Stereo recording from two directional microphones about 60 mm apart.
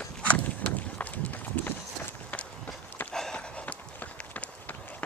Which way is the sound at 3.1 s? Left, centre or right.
Centre.